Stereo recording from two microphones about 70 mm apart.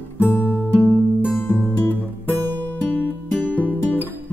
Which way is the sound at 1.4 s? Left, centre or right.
Left.